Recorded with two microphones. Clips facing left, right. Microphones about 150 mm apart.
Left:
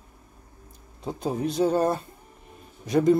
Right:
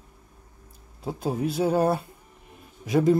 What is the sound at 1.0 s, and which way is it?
Speech, 5° right (ahead or behind).